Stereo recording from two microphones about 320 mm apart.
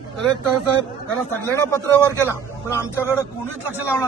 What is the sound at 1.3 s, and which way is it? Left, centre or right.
Speech, centre.